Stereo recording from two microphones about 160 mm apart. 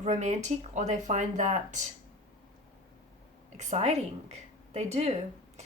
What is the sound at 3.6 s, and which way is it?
Speech, 45° right (ahead or behind).